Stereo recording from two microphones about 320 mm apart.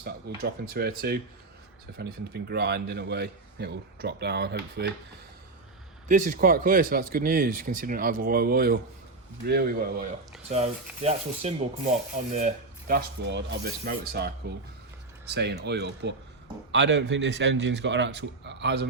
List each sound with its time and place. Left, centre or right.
0.7 s a man's voice: right
6.1 s a man's voice: right